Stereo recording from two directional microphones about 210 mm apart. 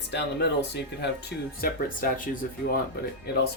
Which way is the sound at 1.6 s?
45° left (ahead or behind).